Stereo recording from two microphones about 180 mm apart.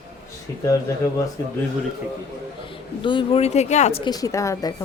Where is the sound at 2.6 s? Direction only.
25° left (ahead or behind).